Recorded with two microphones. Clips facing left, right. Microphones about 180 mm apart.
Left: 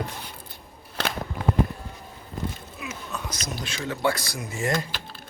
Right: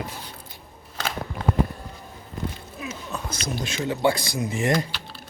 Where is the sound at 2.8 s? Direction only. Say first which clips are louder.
Right 2 dB; 30° right (ahead or behind).